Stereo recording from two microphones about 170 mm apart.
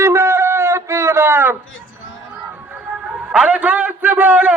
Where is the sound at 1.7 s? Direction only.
90° left.